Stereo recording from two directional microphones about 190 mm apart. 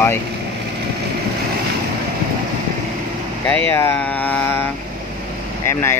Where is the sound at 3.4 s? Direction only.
10° left (ahead or behind).